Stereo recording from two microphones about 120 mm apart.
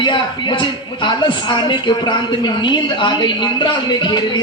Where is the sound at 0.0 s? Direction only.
45° left (ahead or behind).